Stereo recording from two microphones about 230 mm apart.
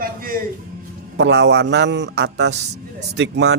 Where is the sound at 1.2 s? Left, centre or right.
Right.